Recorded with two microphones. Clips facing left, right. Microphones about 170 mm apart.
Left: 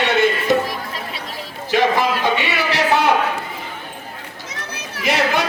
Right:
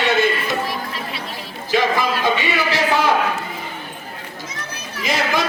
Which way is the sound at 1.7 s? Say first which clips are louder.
Left 2 dB; 65° left (ahead or behind).